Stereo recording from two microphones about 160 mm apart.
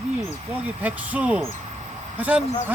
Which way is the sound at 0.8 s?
10° right (ahead or behind).